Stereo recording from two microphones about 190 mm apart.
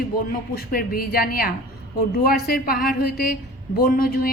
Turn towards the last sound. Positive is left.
turn(degrees=50)  # may be behind; listen again after turning